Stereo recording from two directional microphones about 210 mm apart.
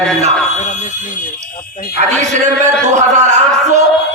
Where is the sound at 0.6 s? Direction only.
35° left (ahead or behind).